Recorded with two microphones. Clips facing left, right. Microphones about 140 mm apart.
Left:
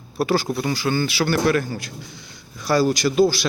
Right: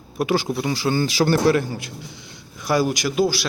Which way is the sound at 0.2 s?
15° right (ahead or behind).